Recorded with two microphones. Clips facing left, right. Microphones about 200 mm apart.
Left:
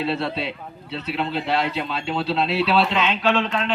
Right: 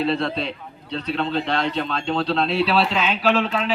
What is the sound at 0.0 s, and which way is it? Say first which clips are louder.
A man's voice: right 2 dB; 5° left (ahead or behind).